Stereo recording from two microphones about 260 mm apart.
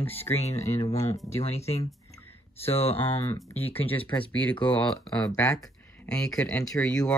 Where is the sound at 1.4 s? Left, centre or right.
Left.